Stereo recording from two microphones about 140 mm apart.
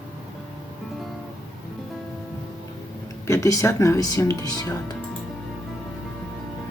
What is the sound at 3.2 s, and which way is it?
Speech, 20° left (ahead or behind).